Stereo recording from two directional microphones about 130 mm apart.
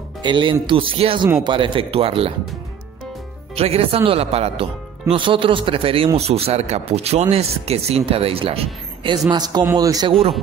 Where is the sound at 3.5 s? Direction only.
50° right (ahead or behind).